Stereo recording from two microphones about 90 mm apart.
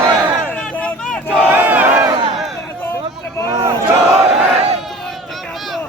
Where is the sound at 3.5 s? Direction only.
45° right (ahead or behind).